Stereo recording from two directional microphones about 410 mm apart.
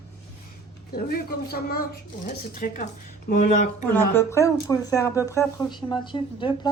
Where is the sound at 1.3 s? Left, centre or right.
Left.